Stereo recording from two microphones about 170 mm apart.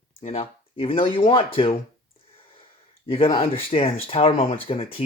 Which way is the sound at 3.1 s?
35° left (ahead or behind).